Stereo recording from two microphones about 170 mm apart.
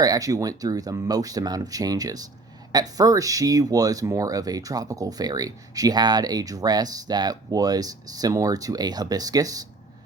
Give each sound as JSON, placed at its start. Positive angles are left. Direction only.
{"t": 0.0, "sound": "speech", "side_deg": -20}